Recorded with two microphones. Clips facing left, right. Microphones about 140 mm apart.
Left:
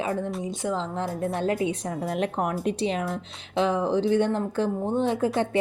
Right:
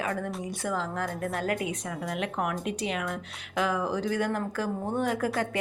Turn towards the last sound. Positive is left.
turn(degrees=25)  # may be behind; listen again after turning